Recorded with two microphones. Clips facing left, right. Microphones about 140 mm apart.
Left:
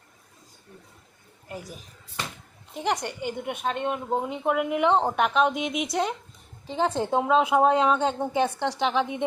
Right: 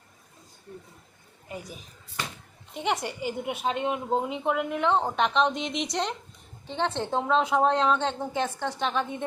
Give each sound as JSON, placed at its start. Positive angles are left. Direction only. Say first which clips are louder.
{"t": 1.5, "sound": "a woman's voice", "louder": "left 1 dB", "side_deg": 0}